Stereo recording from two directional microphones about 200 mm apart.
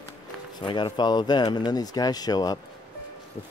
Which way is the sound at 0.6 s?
25° left (ahead or behind).